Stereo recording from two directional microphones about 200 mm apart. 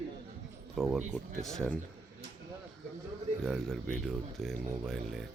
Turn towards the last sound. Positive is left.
turn(degrees=0)  # may be behind; listen again after turning